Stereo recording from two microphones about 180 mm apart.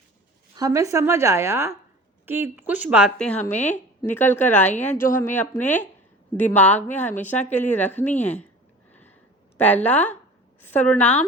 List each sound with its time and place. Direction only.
0.5 s speech: 20° right (ahead or behind)
3.2 s speech: 5° left (ahead or behind)
3.5 s speech: 40° left (ahead or behind)
4.0 s speech: 10° left (ahead or behind)
8.9 s a sound: 10° left (ahead or behind)
9.6 s speech: 10° left (ahead or behind)